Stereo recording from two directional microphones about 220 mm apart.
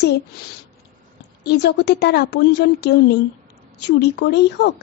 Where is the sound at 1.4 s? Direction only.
50° left (ahead or behind).